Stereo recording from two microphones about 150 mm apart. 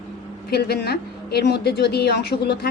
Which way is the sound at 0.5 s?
90° left.